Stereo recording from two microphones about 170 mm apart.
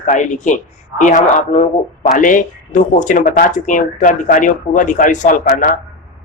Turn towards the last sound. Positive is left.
turn(degrees=50)  # may be behind; listen again after turning